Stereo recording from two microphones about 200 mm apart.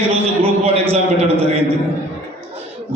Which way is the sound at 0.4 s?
30° right (ahead or behind).